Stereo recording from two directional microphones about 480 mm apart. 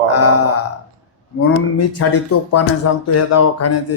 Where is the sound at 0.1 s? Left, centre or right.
Left.